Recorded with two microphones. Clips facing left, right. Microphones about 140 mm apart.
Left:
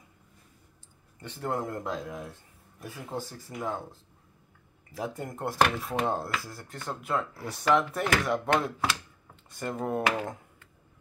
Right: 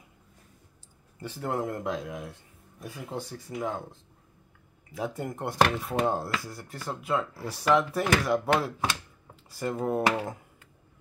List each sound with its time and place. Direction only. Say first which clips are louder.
1.4 s speech: right 1 dB; centre (ahead or behind)
4.9 s speech: right 2 dB; centre (ahead or behind)